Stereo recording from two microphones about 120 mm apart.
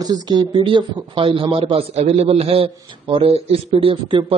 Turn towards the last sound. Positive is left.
turn(degrees=-45)  # may be behind; listen again after turning